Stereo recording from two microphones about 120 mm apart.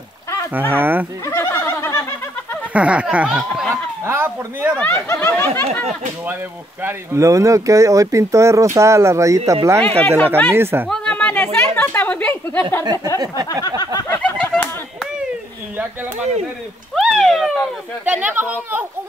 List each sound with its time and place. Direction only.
0.5 s speech: 15° right (ahead or behind)
1.2 s a sound: 20° left (ahead or behind)
2.7 s speech: 10° right (ahead or behind)
4.0 s speech: 20° right (ahead or behind)
4.7 s speech: 20° left (ahead or behind)
6.8 s speech: 20° right (ahead or behind)
9.8 s speech: 10° left (ahead or behind)
10.5 s speech: 20° right (ahead or behind)
10.9 s a sound: 10° left (ahead or behind)
14.1 s a sound: 10° left (ahead or behind)
16.9 s a sound: 5° right (ahead or behind)
18.0 s speech: 15° right (ahead or behind)